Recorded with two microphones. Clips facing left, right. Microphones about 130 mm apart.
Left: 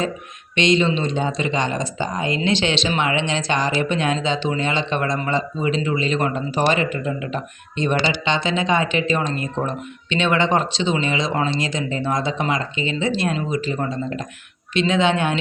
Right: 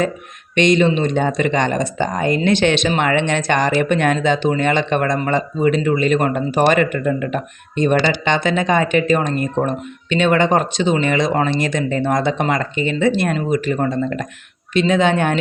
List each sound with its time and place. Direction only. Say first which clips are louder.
0.5 s speech: right 4 dB; 55° right (ahead or behind)
14.7 s speech: right 3 dB; 45° right (ahead or behind)